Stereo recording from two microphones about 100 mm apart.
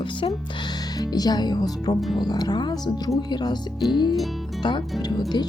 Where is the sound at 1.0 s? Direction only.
45° left (ahead or behind).